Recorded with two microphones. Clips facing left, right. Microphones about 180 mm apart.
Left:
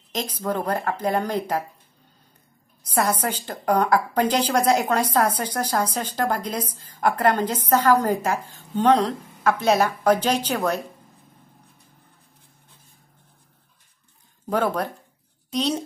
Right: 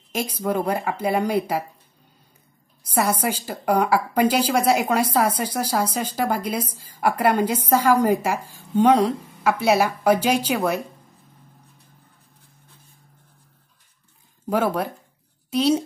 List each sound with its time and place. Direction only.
0.1 s a woman's voice: 10° right (ahead or behind)
2.9 s a woman's voice: 10° right (ahead or behind)
14.5 s a woman's voice: 5° right (ahead or behind)